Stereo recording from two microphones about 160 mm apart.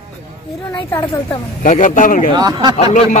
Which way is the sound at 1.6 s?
55° left (ahead or behind).